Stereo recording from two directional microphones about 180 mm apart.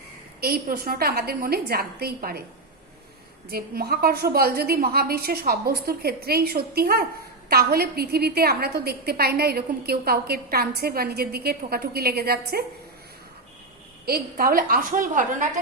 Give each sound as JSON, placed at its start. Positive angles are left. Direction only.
{"t": 0.4, "sound": "a woman's voice", "side_deg": -55}
{"t": 3.5, "sound": "a woman's voice", "side_deg": -60}
{"t": 14.0, "sound": "a woman's voice", "side_deg": -55}